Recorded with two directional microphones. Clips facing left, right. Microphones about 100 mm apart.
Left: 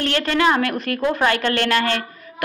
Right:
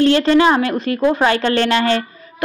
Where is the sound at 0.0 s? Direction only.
25° right (ahead or behind).